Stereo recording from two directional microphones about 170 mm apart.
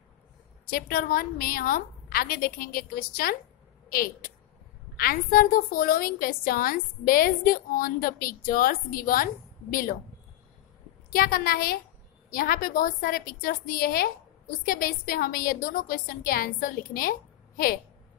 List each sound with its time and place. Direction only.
0.7 s a woman's voice: 60° left (ahead or behind)
11.1 s a woman's voice: 60° left (ahead or behind)